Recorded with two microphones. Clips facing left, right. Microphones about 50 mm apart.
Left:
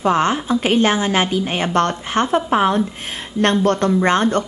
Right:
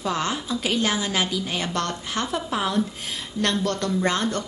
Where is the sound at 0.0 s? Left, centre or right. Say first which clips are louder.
Left 9 dB; left.